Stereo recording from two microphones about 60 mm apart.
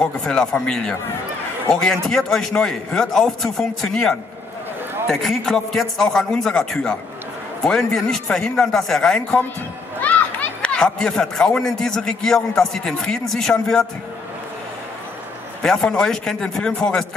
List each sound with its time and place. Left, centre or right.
0.0 s a man's voice: centre
10.0 s a sound: left
10.6 s a man's voice: centre
15.6 s a man's voice: centre